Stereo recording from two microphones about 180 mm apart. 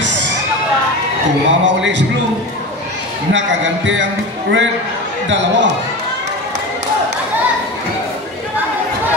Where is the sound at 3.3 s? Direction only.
90° right.